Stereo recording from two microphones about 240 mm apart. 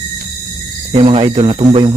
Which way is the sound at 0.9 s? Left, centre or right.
Right.